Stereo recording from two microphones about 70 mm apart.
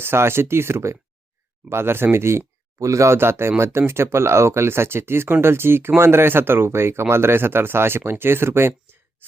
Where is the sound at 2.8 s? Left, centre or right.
Right.